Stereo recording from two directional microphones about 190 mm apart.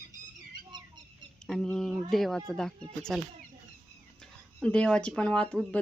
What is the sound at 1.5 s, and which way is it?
Speech, centre (ahead or behind).